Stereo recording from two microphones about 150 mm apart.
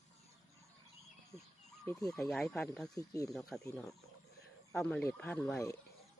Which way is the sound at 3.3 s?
Centre (ahead or behind).